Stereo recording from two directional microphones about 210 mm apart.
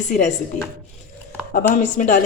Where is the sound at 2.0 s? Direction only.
40° left (ahead or behind).